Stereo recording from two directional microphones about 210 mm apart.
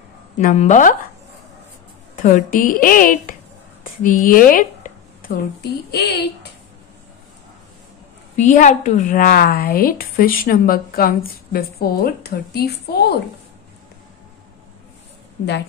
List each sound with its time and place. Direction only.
0.4 s a woman's voice: 35° left (ahead or behind)
2.2 s a woman's voice: 40° left (ahead or behind)
8.4 s a woman's voice: 35° left (ahead or behind)